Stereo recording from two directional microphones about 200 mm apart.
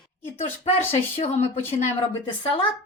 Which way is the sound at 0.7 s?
30° left (ahead or behind).